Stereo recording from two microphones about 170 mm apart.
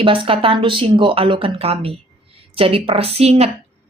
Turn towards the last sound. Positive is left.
turn(degrees=-40)  # may be behind; listen again after turning